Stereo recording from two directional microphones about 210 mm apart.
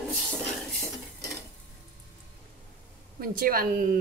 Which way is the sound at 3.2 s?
45° right (ahead or behind).